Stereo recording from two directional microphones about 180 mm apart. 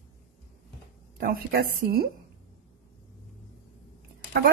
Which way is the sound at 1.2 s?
60° right (ahead or behind).